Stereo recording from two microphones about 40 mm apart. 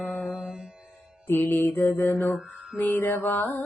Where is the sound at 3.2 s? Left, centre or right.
Left.